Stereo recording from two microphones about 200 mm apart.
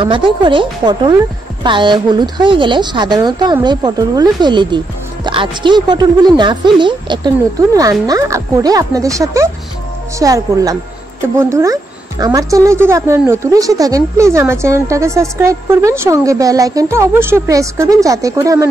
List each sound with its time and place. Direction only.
0.0 s a woman's voice: 25° right (ahead or behind)